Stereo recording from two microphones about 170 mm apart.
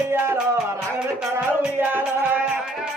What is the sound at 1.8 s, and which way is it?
Music, 10° right (ahead or behind).